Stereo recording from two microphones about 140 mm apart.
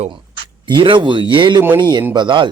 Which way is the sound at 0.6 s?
35° right (ahead or behind).